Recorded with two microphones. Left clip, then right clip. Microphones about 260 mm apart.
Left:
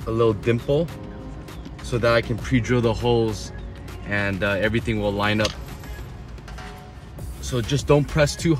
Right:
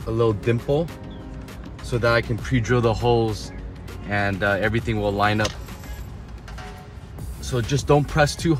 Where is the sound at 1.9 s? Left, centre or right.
Centre.